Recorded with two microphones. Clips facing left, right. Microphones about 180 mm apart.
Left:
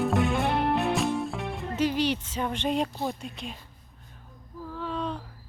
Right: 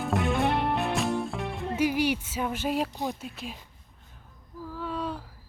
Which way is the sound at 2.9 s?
15° right (ahead or behind).